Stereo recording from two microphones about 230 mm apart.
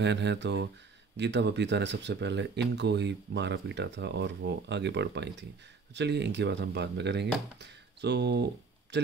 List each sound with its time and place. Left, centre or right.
0.0 s speech: right